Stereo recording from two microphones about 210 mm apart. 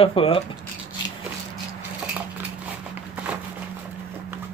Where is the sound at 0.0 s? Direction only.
25° left (ahead or behind).